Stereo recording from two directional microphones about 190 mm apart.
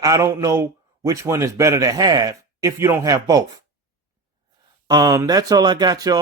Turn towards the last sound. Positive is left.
turn(degrees=-20)  # may be behind; listen again after turning